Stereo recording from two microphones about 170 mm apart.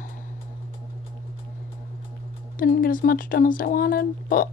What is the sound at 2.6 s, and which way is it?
Speech, 55° left (ahead or behind).